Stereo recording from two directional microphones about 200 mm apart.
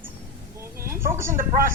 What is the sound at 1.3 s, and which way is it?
Speech, 45° right (ahead or behind).